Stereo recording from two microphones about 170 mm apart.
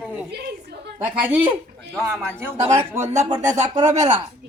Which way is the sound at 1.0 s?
10° right (ahead or behind).